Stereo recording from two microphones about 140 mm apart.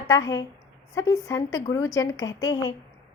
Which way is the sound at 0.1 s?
25° left (ahead or behind).